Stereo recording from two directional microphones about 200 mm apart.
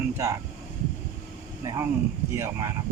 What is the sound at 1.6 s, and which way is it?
Speech, 15° right (ahead or behind).